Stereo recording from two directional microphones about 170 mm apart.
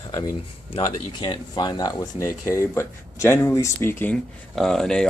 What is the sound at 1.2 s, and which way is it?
Speech, 25° left (ahead or behind).